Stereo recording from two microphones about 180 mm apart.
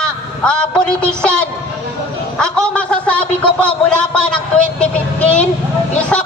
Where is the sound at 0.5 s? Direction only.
5° left (ahead or behind).